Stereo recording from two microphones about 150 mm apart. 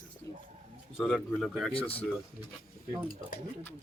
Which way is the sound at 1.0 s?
Centre (ahead or behind).